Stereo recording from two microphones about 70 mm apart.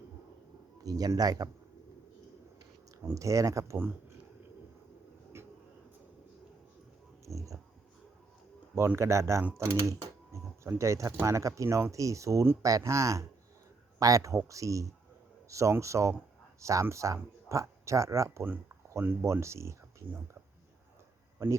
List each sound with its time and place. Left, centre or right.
0.8 s speech: right
3.2 s speech: right
5.3 s a sound: right
7.3 s a sound: right
9.0 s speech: right
10.8 s speech: right
21.4 s speech: right